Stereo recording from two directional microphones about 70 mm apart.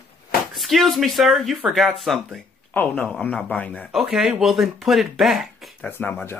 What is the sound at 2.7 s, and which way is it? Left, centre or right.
Speech, left.